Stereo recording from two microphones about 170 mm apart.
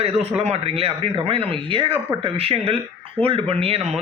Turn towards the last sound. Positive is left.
turn(degrees=-35)  # may be behind; listen again after turning